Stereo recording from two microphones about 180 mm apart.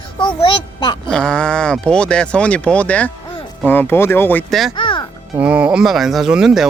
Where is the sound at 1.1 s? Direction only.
5° left (ahead or behind).